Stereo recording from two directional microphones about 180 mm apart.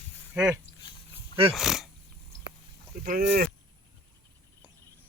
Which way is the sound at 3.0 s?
50° right (ahead or behind).